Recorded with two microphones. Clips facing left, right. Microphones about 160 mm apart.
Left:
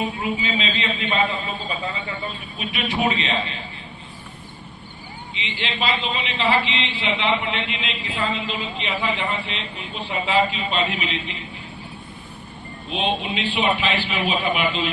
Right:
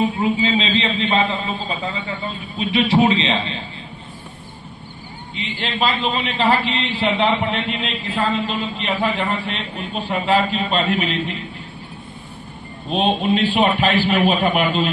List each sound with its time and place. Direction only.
0.2 s a man's voice: 30° right (ahead or behind)
2.7 s a man's voice: 30° right (ahead or behind)
5.6 s a man's voice: 45° right (ahead or behind)
12.9 s a man's voice: 45° right (ahead or behind)